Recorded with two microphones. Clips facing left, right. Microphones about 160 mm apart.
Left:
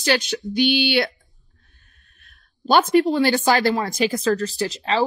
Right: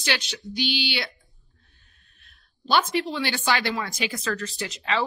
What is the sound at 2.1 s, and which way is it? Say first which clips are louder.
Speech: left 3 dB; 50° left (ahead or behind).